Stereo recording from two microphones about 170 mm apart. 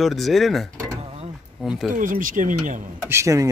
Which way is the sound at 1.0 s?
35° right (ahead or behind).